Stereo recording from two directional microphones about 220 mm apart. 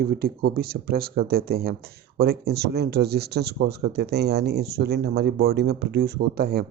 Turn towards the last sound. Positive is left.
turn(degrees=-45)  # may be behind; listen again after turning